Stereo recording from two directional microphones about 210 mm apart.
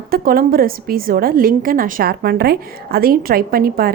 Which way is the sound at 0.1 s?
45° right (ahead or behind).